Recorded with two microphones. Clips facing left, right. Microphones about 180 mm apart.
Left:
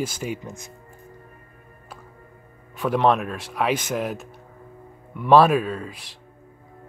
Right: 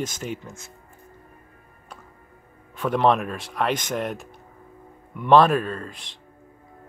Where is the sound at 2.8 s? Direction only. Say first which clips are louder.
Even; centre (ahead or behind).